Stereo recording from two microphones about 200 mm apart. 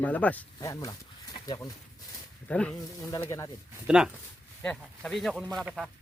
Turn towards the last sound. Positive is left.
turn(degrees=0)  # may be behind; listen again after turning